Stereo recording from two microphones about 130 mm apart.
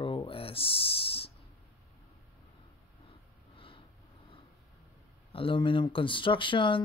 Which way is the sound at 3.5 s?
40° left (ahead or behind).